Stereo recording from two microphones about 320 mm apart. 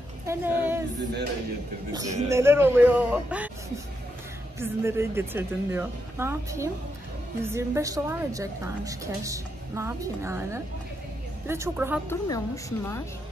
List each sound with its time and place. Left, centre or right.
0.3 s a woman's voice: centre
2.0 s a woman's voice: centre
4.6 s a woman's voice: centre
12.1 s a woman's voice: centre